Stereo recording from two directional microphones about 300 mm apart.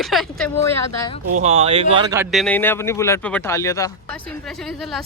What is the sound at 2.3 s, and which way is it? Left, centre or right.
Speech, centre.